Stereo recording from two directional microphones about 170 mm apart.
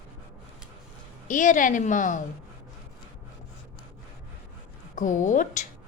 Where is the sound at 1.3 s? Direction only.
50° left (ahead or behind).